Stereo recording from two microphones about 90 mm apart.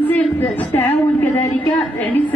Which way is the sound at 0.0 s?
20° left (ahead or behind).